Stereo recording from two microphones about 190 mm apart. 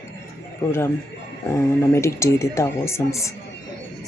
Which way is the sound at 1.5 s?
15° left (ahead or behind).